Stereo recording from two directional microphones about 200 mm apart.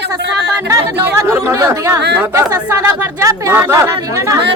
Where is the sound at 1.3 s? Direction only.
10° right (ahead or behind).